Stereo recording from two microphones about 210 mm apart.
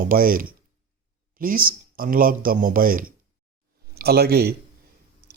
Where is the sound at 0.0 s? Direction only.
40° right (ahead or behind).